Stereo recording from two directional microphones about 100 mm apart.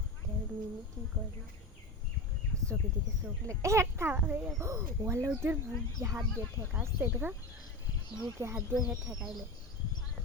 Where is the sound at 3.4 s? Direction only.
30° right (ahead or behind).